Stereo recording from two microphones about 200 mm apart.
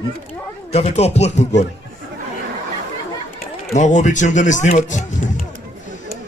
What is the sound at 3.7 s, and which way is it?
Speech, 35° left (ahead or behind).